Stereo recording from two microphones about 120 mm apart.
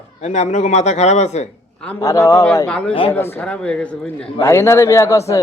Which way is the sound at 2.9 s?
50° left (ahead or behind).